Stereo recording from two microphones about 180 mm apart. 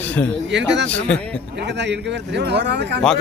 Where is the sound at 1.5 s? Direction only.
75° right (ahead or behind).